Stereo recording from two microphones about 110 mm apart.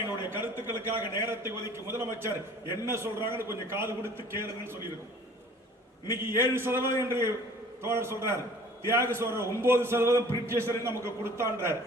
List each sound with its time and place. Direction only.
0.3 s a man's voice: 20° right (ahead or behind)
6.1 s a man's voice: 20° right (ahead or behind)